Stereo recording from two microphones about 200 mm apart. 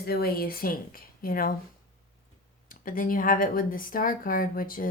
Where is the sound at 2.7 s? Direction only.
45° left (ahead or behind).